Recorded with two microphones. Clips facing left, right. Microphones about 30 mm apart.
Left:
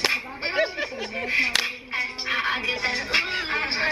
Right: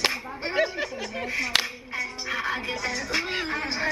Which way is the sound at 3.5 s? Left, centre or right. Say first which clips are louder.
Left 3 dB; left.